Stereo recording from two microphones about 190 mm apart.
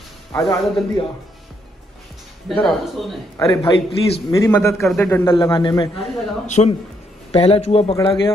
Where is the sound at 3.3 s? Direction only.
20° left (ahead or behind).